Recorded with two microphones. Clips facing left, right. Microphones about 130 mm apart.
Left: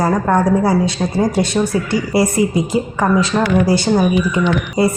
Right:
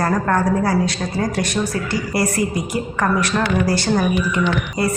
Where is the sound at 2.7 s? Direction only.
15° left (ahead or behind).